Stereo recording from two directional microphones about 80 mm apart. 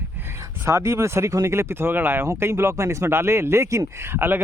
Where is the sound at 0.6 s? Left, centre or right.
Right.